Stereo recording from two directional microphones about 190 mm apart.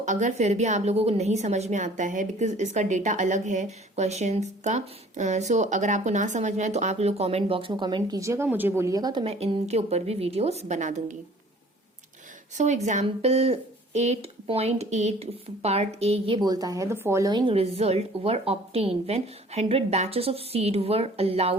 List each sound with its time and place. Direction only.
0.0 s a woman's voice: 40° right (ahead or behind); by 9.2 s 20° right (ahead or behind)
9.2 s a woman's voice: 30° right (ahead or behind)
12.5 s a woman's voice: 40° right (ahead or behind)